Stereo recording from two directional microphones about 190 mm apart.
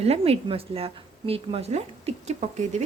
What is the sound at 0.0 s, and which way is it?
Speech, 30° right (ahead or behind).